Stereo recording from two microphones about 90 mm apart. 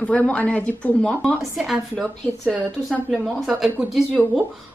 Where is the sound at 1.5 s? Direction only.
5° right (ahead or behind).